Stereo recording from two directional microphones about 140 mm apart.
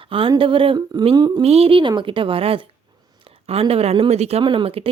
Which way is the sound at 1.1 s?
30° right (ahead or behind).